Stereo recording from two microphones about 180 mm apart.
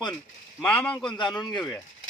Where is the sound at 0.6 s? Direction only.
10° left (ahead or behind).